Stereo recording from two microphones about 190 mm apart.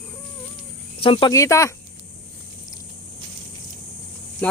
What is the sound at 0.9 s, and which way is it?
Speech, 30° left (ahead or behind).